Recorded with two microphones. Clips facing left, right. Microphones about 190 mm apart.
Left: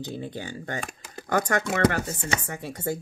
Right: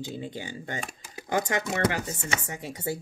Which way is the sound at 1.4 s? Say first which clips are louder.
Left 3 dB; 45° left (ahead or behind).